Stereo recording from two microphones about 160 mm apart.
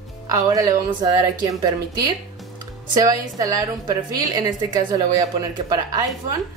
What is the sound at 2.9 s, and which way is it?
Speech, 25° right (ahead or behind).